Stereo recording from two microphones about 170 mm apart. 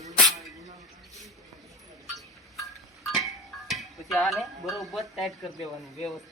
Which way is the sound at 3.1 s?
Centre (ahead or behind).